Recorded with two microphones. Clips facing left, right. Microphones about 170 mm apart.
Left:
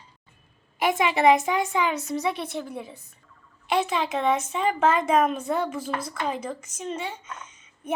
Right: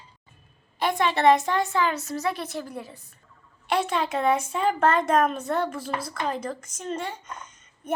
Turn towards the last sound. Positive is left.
turn(degrees=5)  # may be behind; listen again after turning